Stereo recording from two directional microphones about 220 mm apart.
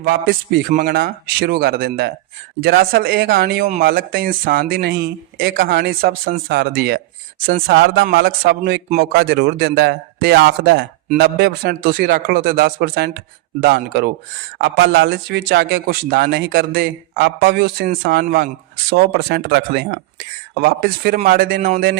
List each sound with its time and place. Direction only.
0.0 s speech: 45° right (ahead or behind)